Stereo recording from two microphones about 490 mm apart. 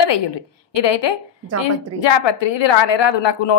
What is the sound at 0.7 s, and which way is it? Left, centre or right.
A woman's voice, left.